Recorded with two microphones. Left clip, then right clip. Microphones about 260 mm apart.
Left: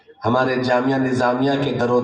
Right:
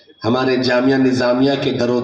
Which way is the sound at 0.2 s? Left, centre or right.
Right.